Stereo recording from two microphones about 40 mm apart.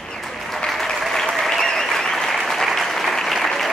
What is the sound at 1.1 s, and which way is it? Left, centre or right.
Applause, centre.